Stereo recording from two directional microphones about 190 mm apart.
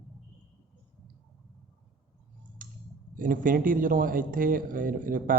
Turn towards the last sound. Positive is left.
turn(degrees=-45)  # may be behind; listen again after turning